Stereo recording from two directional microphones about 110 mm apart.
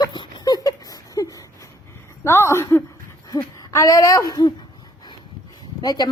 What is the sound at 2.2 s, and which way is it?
A woman's voice, 25° left (ahead or behind).